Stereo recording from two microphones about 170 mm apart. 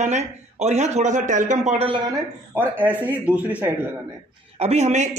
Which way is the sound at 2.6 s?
10° right (ahead or behind).